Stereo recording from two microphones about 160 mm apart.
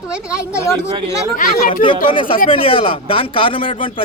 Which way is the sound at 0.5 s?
15° left (ahead or behind).